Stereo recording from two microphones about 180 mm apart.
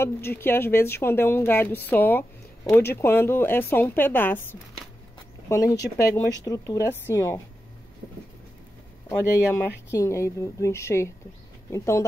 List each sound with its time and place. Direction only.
0.0 s a woman's voice: 15° left (ahead or behind)
9.5 s a woman's voice: 15° left (ahead or behind)